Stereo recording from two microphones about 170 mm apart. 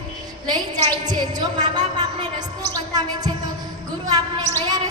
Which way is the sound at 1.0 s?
25° right (ahead or behind).